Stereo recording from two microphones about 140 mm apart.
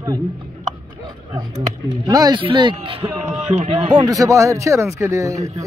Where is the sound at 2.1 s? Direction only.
25° right (ahead or behind).